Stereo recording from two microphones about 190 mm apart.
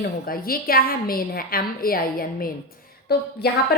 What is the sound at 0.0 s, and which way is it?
A woman's voice, 50° left (ahead or behind).